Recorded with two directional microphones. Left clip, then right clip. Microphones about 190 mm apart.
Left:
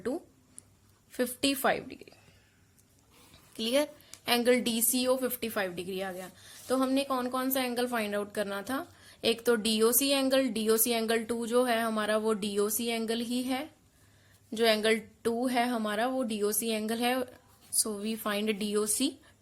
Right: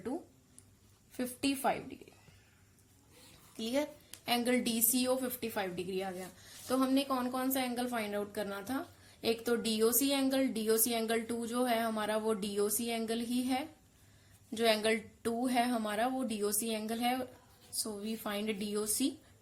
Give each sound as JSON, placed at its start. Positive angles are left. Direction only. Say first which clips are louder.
{"t": 1.1, "sound": "a woman's voice", "louder": "left 6 dB", "side_deg": 40}
{"t": 3.6, "sound": "a woman's voice", "louder": "left 6 dB", "side_deg": 40}